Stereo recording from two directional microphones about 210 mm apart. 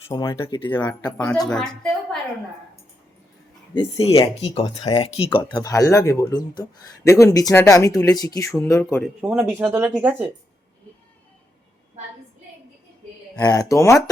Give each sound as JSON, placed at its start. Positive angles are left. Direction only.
{"t": 0.1, "sound": "speech", "side_deg": 20}
{"t": 0.7, "sound": "a woman's voice", "side_deg": 10}
{"t": 3.8, "sound": "speech", "side_deg": 25}
{"t": 9.0, "sound": "speech", "side_deg": -5}
{"t": 13.4, "sound": "speech", "side_deg": 15}